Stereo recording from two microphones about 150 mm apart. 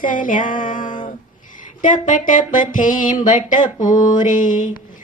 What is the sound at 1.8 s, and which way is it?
Mantra, 60° left (ahead or behind).